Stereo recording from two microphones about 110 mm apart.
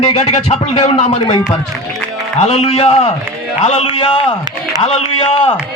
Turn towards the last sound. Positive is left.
turn(degrees=70)  # may be behind; listen again after turning